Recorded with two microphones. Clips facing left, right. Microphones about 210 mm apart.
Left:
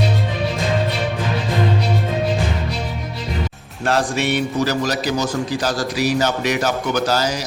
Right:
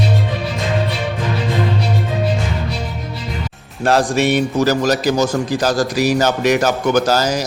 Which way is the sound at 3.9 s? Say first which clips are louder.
Right 4 dB; 40° right (ahead or behind).